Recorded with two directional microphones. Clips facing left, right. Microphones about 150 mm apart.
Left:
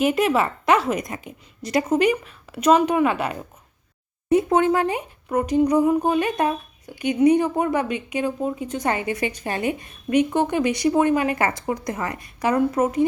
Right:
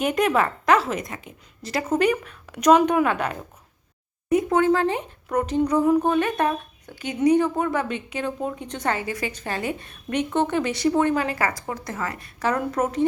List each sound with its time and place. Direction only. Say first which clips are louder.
0.0 s a woman's voice: left 2 dB; 5° left (ahead or behind)
1.1 s a woman's voice: left 3 dB; 25° left (ahead or behind)
1.7 s a woman's voice: left 2 dB; 10° left (ahead or behind)
4.3 s speech: left 1 dB; 30° left (ahead or behind)
11.3 s speech: left 3 dB; 25° left (ahead or behind)